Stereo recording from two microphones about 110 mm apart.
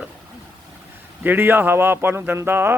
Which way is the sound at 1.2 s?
20° right (ahead or behind).